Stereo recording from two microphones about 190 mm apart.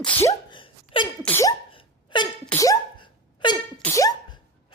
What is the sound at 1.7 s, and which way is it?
Hiccup, 25° left (ahead or behind).